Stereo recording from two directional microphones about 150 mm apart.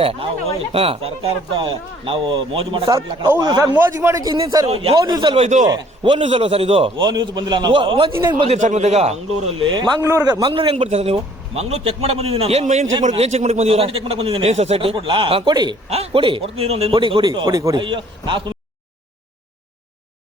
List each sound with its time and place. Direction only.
0.0 s a man's voice: 40° right (ahead or behind)
3.8 s a man's voice: 15° right (ahead or behind)
4.7 s a man's voice: 40° right (ahead or behind)
5.4 s a man's voice: 50° right (ahead or behind)
5.6 s a man's voice: 30° right (ahead or behind)
8.4 s a man's voice: 50° right (ahead or behind)
9.6 s a man's voice: 30° right (ahead or behind)
10.5 s a man's voice: 35° right (ahead or behind)
15.9 s a man's voice: 40° right (ahead or behind)